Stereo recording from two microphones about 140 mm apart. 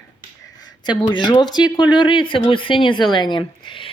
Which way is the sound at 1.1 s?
35° left (ahead or behind).